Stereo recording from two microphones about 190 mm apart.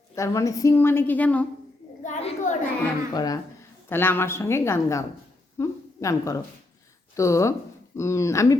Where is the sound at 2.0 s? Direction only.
40° left (ahead or behind).